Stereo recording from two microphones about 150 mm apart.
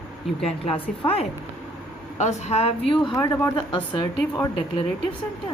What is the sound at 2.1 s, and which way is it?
Speech, 50° left (ahead or behind).